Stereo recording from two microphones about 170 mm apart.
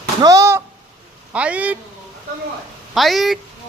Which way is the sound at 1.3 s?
10° right (ahead or behind).